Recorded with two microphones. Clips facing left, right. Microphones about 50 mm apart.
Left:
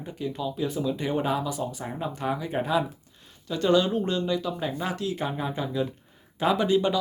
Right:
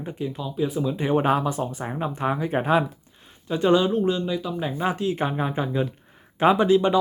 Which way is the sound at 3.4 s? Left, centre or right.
Right.